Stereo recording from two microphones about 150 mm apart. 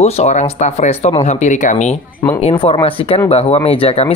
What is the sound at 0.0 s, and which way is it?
Speech, 45° left (ahead or behind).